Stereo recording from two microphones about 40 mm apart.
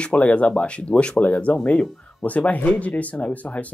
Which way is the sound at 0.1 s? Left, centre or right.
Left.